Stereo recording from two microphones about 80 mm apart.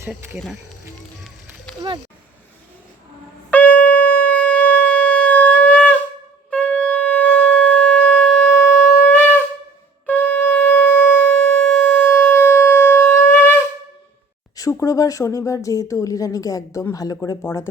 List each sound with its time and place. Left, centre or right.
3.5 s shofar: centre
6.5 s wind instrument: centre
10.1 s shofar: left
14.5 s speech: left
17.4 s speech: left